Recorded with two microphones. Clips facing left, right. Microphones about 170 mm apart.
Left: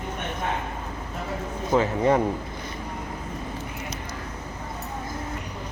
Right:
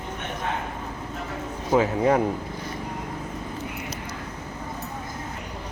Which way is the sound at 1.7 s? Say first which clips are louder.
Right 1 dB; 5° right (ahead or behind).